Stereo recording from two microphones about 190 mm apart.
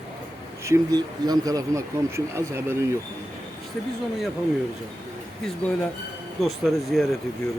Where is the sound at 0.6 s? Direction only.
15° right (ahead or behind).